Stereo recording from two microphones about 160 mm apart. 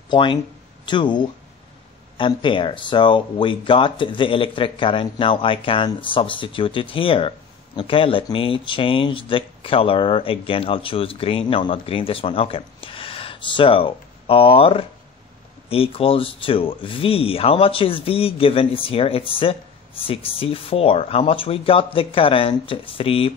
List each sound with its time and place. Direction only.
0.1 s speech: 30° left (ahead or behind)